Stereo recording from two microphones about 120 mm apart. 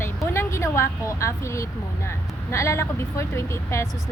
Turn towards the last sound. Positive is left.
turn(degrees=25)  # may be behind; listen again after turning